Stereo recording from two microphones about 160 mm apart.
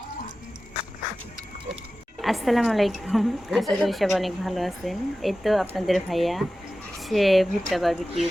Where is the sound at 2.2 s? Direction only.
Centre (ahead or behind).